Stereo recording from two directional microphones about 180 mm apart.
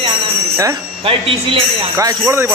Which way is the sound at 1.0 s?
30° right (ahead or behind).